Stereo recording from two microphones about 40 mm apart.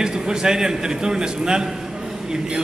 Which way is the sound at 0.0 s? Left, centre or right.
Centre.